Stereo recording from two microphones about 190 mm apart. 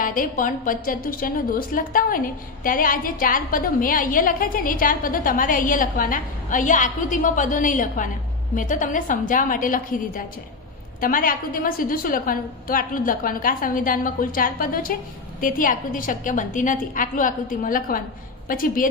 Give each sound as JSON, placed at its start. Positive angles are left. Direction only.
{"t": 0.0, "sound": "a woman's voice", "side_deg": 45}